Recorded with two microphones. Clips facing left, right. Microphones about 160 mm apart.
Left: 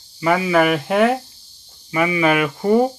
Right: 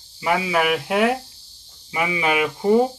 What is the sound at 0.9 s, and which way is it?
Speech, 10° right (ahead or behind).